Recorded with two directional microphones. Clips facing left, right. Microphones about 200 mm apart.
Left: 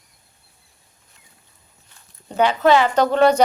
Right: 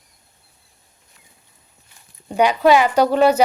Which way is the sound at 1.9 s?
15° right (ahead or behind).